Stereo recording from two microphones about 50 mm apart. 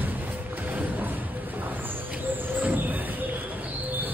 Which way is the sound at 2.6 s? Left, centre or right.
Right.